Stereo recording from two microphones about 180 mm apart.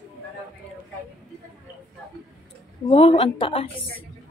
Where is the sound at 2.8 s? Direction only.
35° left (ahead or behind).